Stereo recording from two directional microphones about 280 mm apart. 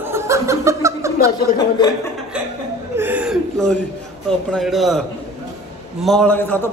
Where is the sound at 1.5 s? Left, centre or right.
Centre.